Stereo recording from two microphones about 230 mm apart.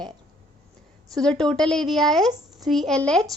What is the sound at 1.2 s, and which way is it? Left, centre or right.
A child's voice, centre.